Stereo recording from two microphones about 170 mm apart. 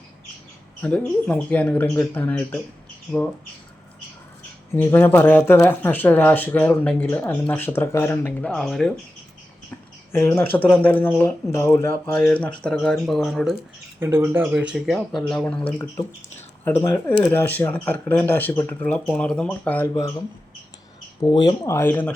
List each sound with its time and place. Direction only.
0.8 s speech: 10° left (ahead or behind)
4.7 s speech: 15° left (ahead or behind)
10.1 s speech: 15° left (ahead or behind)
14.0 s speech: 15° right (ahead or behind); by 19.9 s 10° left (ahead or behind)
19.9 s speech: 20° left (ahead or behind)